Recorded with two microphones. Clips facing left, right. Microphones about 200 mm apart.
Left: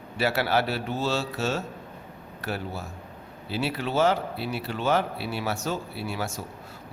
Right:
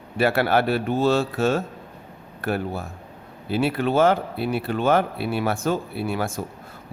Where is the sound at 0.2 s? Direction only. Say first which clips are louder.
Right 5 dB; 55° right (ahead or behind).